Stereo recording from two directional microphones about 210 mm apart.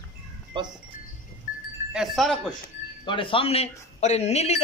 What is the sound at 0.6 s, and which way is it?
Wind chime, 20° right (ahead or behind).